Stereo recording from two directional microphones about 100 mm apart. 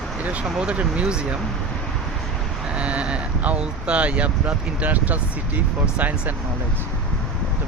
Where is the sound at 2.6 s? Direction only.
10° right (ahead or behind).